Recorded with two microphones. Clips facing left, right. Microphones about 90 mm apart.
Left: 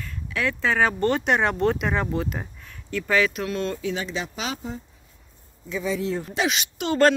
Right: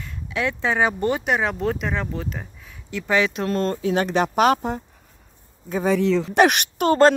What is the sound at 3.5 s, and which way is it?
Speech, 40° right (ahead or behind).